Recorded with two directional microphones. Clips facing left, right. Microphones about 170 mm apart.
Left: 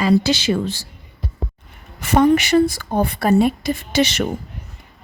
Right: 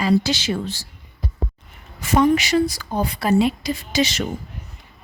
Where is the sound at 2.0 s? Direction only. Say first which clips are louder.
Left 2 dB; 65° left (ahead or behind).